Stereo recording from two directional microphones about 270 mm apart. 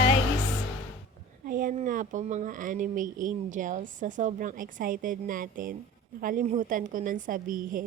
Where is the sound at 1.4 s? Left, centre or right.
Right.